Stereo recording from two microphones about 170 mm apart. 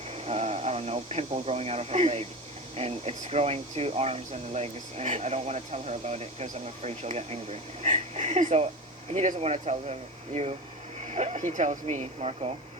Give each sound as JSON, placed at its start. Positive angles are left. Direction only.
{"t": 0.1, "sound": "speech", "side_deg": -40}